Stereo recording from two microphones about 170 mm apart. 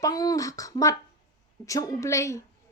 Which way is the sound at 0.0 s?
20° left (ahead or behind).